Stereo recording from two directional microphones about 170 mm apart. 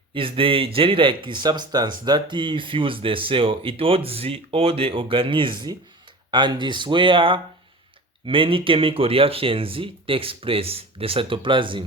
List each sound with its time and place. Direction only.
0.1 s speech: 30° right (ahead or behind)